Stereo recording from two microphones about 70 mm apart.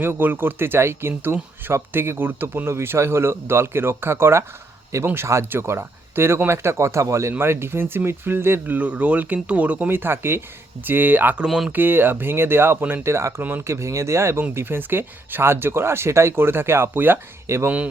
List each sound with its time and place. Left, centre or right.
0.0 s speech: right
7.3 s speech: right
11.4 s speech: centre
11.7 s speech: right
13.4 s speech: right
13.7 s speech: right
17.4 s speech: right